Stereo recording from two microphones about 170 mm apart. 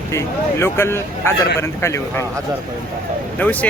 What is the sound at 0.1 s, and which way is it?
A man's voice, 15° left (ahead or behind).